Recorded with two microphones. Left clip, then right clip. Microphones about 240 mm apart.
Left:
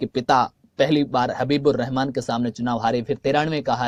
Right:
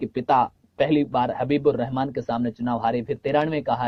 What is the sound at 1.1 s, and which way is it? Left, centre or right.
Speech, left.